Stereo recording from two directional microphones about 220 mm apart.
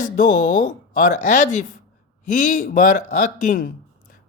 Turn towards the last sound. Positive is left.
turn(degrees=35)  # may be behind; listen again after turning